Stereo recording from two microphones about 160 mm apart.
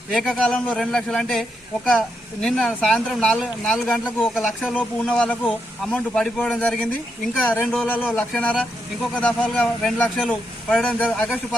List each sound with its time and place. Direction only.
0.1 s speech: centre (ahead or behind)